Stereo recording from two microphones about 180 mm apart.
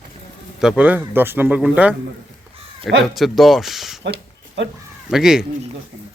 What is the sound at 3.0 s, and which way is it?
Speech, centre (ahead or behind).